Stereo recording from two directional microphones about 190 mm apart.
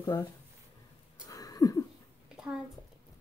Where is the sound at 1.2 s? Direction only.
20° left (ahead or behind).